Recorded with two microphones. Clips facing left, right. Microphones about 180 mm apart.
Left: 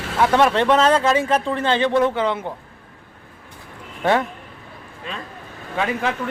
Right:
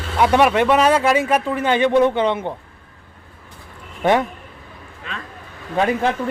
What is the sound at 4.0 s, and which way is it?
Speech, 15° right (ahead or behind).